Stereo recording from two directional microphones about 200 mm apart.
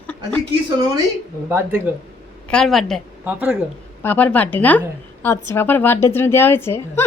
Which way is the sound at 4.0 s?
10° left (ahead or behind).